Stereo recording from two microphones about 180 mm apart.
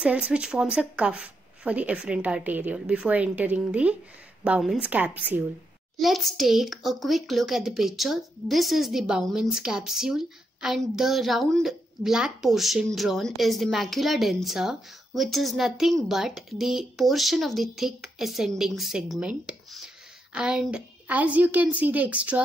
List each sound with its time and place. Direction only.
0.0 s a child's voice: 5° right (ahead or behind)